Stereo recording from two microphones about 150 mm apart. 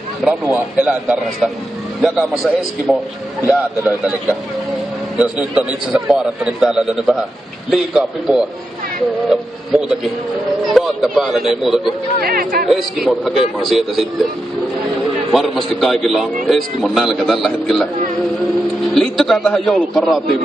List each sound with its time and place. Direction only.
0.2 s a man's voice: 5° right (ahead or behind)
5.1 s a man's voice: 5° right (ahead or behind)
12.2 s speech: 75° right (ahead or behind)
12.6 s a man's voice: centre (ahead or behind)
15.3 s a man's voice: centre (ahead or behind)
18.9 s a man's voice: centre (ahead or behind)